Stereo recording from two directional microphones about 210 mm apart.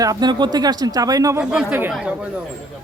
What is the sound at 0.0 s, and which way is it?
A man's voice, 20° right (ahead or behind).